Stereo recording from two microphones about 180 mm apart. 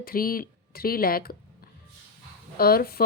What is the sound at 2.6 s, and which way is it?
Speech, 60° left (ahead or behind).